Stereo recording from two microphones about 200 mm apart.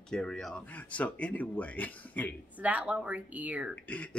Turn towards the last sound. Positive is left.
turn(degrees=-5)  # may be behind; listen again after turning